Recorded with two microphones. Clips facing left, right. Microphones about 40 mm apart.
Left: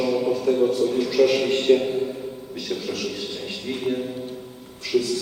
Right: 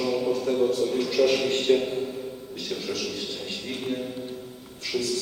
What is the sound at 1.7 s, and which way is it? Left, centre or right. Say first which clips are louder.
Speech: left 4 dB; centre.